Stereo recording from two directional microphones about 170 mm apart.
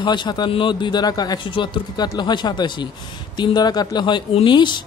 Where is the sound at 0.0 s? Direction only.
25° left (ahead or behind).